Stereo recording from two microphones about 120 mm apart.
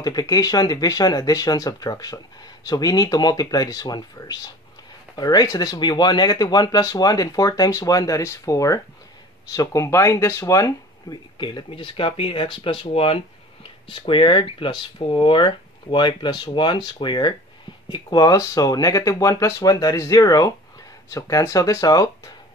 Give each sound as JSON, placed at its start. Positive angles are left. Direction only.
{"t": 0.0, "sound": "speech", "side_deg": 30}
{"t": 11.3, "sound": "speech", "side_deg": 40}